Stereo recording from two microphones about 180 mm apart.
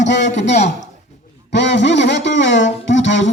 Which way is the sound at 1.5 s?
75° left (ahead or behind).